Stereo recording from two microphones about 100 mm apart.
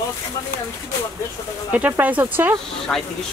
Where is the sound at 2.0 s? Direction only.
20° right (ahead or behind).